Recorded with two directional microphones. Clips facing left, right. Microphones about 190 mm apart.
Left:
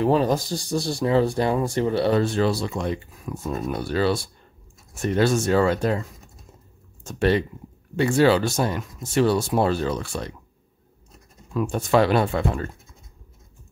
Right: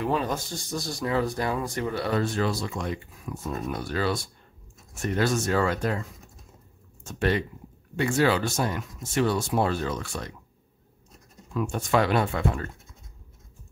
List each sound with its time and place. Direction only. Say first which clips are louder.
0.0 s speech: left 7 dB; 35° left (ahead or behind)
7.1 s speech: left 5 dB; 30° left (ahead or behind)
11.5 s speech: left 4 dB; 35° left (ahead or behind)